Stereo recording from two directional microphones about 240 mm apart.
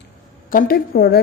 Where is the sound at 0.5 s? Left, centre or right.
Left.